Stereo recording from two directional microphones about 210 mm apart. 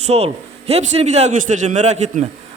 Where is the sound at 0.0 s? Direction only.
30° right (ahead or behind).